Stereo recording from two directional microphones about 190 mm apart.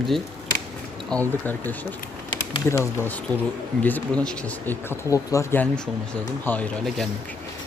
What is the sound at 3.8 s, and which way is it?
Speech, 10° left (ahead or behind).